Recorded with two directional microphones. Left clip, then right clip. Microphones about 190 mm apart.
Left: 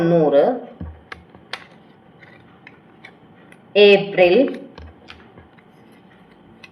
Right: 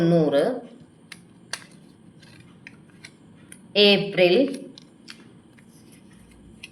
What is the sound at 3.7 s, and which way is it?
Speech, 40° right (ahead or behind).